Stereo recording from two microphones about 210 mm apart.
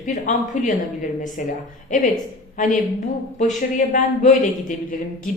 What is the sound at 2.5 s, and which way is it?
A woman's voice, 40° left (ahead or behind).